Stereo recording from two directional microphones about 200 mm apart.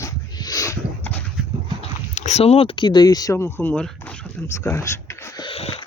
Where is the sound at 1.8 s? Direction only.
35° left (ahead or behind).